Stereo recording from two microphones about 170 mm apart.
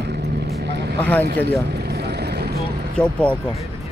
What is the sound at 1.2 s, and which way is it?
Vehicle, 75° right (ahead or behind).